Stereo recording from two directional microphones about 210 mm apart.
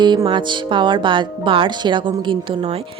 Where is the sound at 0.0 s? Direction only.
20° right (ahead or behind).